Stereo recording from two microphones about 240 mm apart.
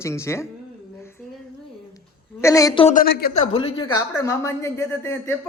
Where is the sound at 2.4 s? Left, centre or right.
Centre.